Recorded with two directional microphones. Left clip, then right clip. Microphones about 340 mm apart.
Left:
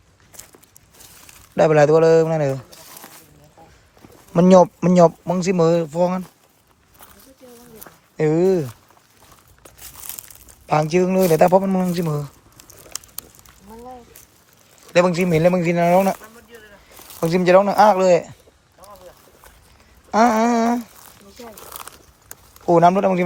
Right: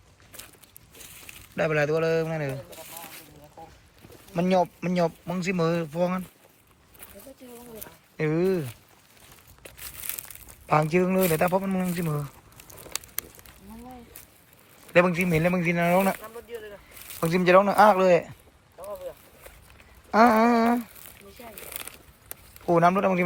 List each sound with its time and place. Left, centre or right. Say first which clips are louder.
1.3 s speech: left 11 dB; centre
4.4 s speech: left 11 dB; left
8.1 s speech: left 8 dB; centre
10.7 s speech: left 5 dB; centre
14.9 s speech: left 5 dB; centre
18.8 s boat: right 5 dB; centre
20.1 s a sound: left 3 dB; centre
21.7 s crumpling: left 4 dB; centre